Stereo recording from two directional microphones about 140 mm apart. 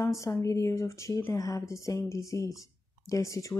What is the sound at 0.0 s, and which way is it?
Speech, 25° left (ahead or behind).